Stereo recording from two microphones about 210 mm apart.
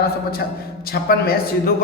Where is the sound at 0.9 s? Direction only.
45° left (ahead or behind).